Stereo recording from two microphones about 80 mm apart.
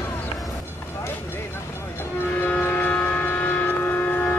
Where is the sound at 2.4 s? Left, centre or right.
Left.